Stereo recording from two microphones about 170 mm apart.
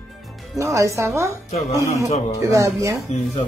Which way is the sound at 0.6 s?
15° right (ahead or behind).